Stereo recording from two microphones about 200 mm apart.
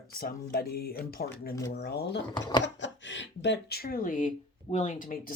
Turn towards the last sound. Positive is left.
turn(degrees=45)  # may be behind; listen again after turning